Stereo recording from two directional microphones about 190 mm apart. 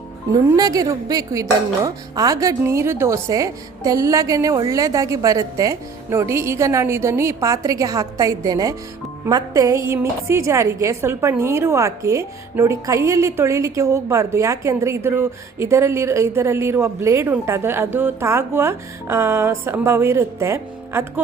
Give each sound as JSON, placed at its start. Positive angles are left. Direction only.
{"t": 0.5, "sound": "a woman's voice", "side_deg": -20}